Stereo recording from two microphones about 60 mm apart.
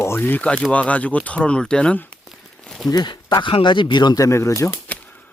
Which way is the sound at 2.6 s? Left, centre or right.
Centre.